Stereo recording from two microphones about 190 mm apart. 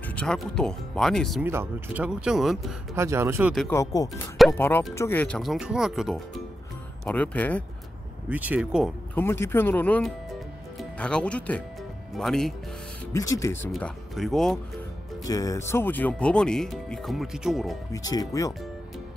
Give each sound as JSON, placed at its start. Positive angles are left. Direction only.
{"t": 0.0, "sound": "speech", "side_deg": 5}
{"t": 1.4, "sound": "speech", "side_deg": -10}
{"t": 2.9, "sound": "speech", "side_deg": -15}
{"t": 3.7, "sound": "speech", "side_deg": 20}
{"t": 8.3, "sound": "speech", "side_deg": -10}
{"t": 9.1, "sound": "speech", "side_deg": 10}
{"t": 13.1, "sound": "speech", "side_deg": 15}
{"t": 13.7, "sound": "speech", "side_deg": 0}
{"t": 15.2, "sound": "speech", "side_deg": 20}
{"t": 17.9, "sound": "speech", "side_deg": 20}